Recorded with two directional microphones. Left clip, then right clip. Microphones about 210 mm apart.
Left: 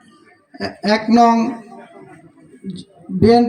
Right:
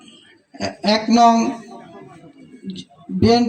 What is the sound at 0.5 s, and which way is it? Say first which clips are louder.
Speech: left 1 dB; 60° right (ahead or behind).